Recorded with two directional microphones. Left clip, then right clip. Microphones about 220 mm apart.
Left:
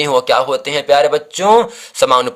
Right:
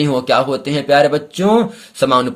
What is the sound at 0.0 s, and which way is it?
Speech, 30° left (ahead or behind).